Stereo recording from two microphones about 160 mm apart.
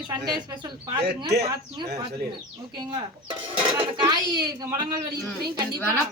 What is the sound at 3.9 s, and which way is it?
A woman's voice, 25° right (ahead or behind).